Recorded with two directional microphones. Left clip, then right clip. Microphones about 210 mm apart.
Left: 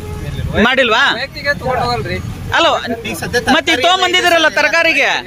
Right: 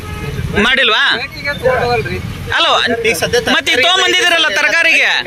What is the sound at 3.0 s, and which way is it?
Speech, 35° right (ahead or behind).